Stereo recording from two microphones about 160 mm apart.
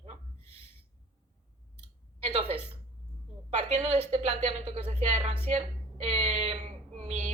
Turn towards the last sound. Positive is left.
turn(degrees=-40)  # may be behind; listen again after turning